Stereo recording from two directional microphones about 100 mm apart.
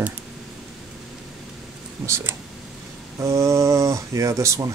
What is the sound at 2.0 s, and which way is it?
Speech, 30° right (ahead or behind).